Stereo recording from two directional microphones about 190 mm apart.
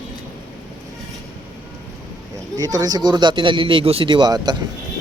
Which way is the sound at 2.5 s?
20° right (ahead or behind).